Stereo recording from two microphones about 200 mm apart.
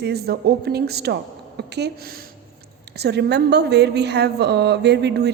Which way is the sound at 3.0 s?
55° right (ahead or behind).